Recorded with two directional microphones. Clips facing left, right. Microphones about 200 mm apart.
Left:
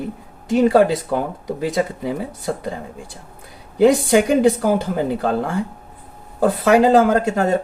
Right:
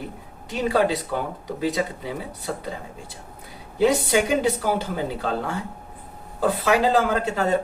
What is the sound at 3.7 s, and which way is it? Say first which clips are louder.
Speech: left 6 dB; 50° left (ahead or behind).